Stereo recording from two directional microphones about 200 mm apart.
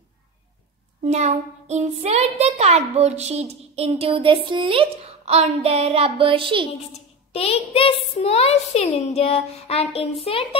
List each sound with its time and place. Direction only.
1.0 s a child's voice: 35° right (ahead or behind)
6.9 s a child's voice: 30° left (ahead or behind)